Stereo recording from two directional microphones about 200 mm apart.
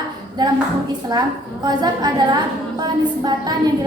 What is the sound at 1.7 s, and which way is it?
A woman's voice, 20° right (ahead or behind).